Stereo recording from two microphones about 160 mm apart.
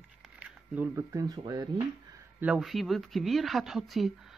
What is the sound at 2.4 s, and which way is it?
Speech, 5° right (ahead or behind).